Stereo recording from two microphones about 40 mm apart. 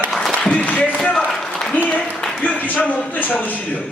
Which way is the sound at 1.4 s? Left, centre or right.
Centre.